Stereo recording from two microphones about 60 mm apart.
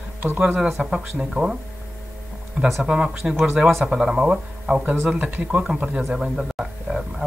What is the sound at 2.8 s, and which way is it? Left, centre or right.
Speech, centre.